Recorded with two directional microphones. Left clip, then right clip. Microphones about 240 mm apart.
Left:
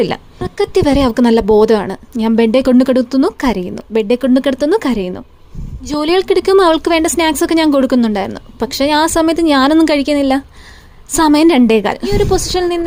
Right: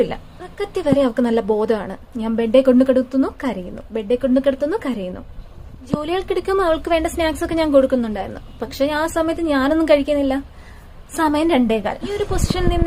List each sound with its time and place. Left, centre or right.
0.0 s speech: left